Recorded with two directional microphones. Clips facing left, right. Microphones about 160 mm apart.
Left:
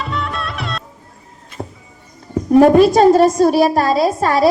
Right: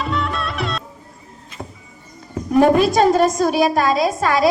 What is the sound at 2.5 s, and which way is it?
A woman's voice, 35° left (ahead or behind).